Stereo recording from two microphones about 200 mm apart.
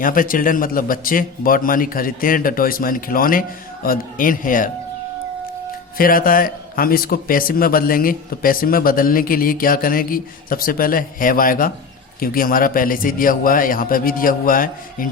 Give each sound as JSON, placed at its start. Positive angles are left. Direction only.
{"t": 0.0, "sound": "a man's voice", "side_deg": 45}
{"t": 6.0, "sound": "a man's voice", "side_deg": 45}